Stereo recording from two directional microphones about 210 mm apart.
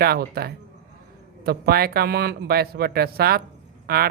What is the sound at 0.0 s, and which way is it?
Speech, 45° right (ahead or behind).